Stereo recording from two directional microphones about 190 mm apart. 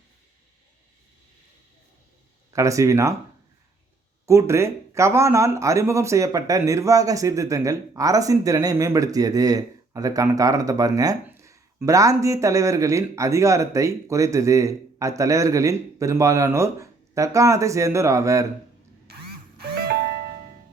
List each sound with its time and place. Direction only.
2.5 s speech: 15° right (ahead or behind)
4.3 s speech: 15° right (ahead or behind)
19.5 s music: 55° right (ahead or behind)